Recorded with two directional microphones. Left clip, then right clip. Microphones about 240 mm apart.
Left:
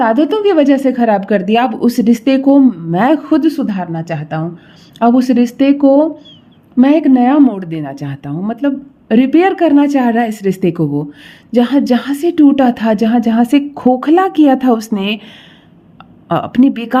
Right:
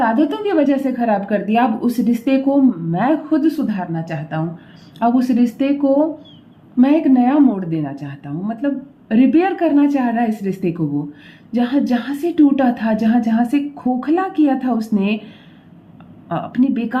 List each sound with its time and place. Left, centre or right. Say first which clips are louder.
0.0 s a woman's voice: left 6 dB; left
16.3 s a woman's voice: left 7 dB; left